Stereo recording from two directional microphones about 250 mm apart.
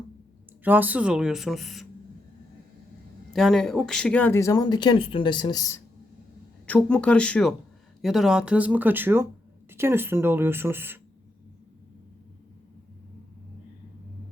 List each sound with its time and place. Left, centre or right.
0.6 s speech: centre
3.3 s speech: centre